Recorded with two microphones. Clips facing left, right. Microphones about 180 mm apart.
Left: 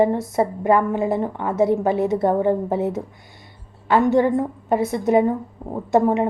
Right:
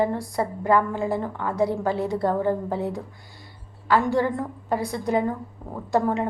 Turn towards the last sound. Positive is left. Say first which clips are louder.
# left 5 dB
turn(degrees=20)  # may be behind; listen again after turning